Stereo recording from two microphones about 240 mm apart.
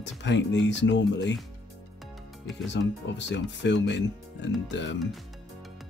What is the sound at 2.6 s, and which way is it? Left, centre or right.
Speech, left.